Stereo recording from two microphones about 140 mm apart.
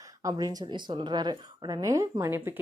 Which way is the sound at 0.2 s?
25° right (ahead or behind).